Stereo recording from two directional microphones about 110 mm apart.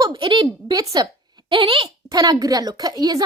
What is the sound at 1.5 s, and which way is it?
Speech, 50° right (ahead or behind).